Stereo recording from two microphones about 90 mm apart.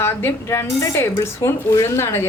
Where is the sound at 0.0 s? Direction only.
25° left (ahead or behind).